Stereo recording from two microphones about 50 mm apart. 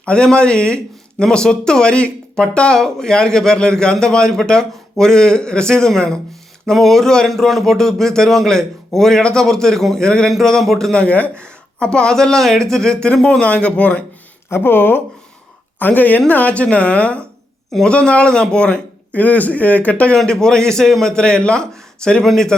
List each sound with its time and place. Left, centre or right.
0.0 s speech: centre
10.9 s speech: left
14.5 s speech: left
15.8 s a woman's voice: left
20.1 s speech: centre